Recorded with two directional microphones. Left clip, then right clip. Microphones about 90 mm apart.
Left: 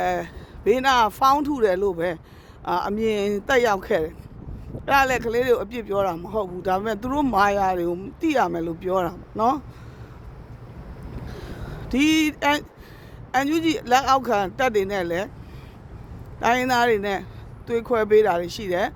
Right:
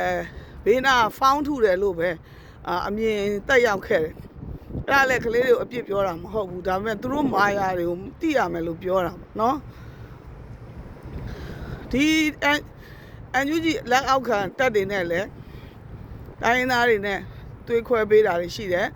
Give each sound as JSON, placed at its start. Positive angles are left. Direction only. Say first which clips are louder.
{"t": 0.0, "sound": "speech", "louder": "left 1 dB", "side_deg": 55}
{"t": 6.1, "sound": "speech", "louder": "left 1 dB", "side_deg": 65}
{"t": 8.5, "sound": "speech", "louder": "even", "side_deg": 45}
{"t": 11.3, "sound": "vehicle", "louder": "even", "side_deg": 60}
{"t": 13.3, "sound": "speech", "louder": "left 1 dB", "side_deg": 65}
{"t": 16.4, "sound": "speech", "louder": "even", "side_deg": 50}